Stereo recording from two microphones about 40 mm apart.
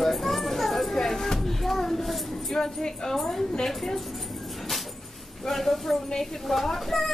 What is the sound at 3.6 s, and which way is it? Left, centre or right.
Dog, centre.